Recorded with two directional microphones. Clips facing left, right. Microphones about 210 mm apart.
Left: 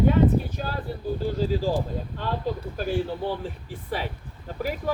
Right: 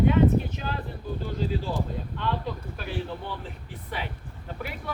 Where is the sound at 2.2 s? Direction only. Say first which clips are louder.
Left 2 dB; 40° left (ahead or behind).